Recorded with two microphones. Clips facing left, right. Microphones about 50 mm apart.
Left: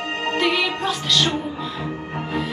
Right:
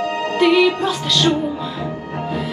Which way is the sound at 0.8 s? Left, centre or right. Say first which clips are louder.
Right 3 dB; centre.